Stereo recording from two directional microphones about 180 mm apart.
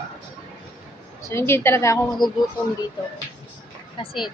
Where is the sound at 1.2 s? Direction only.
15° left (ahead or behind).